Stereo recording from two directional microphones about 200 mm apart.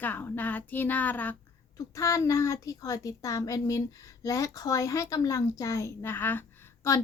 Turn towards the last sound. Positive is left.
turn(degrees=15)  # may be behind; listen again after turning